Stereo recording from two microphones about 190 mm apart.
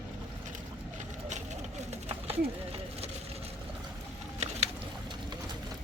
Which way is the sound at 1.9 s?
30° right (ahead or behind).